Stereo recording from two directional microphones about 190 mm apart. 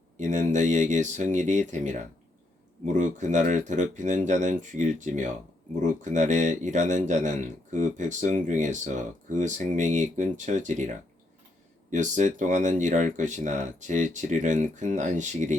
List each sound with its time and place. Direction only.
0.2 s speech: 40° right (ahead or behind)